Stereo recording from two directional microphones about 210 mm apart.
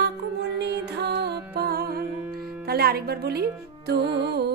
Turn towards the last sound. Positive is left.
turn(degrees=-50)  # may be behind; listen again after turning